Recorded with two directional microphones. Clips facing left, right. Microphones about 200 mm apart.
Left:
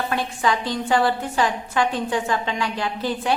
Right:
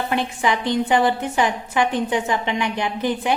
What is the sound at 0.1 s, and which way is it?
A woman's voice, 20° right (ahead or behind).